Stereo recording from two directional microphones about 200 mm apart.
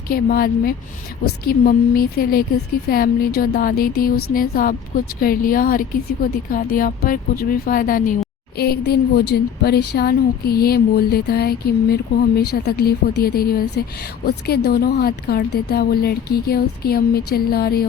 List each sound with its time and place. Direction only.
0.1 s a woman's voice: 50° left (ahead or behind)